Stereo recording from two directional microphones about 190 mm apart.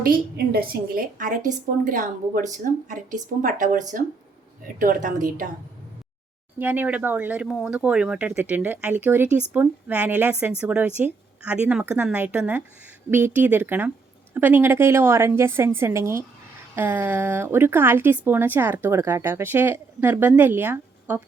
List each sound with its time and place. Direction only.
0.0 s a woman's voice: 50° right (ahead or behind)
6.6 s speech: 10° right (ahead or behind)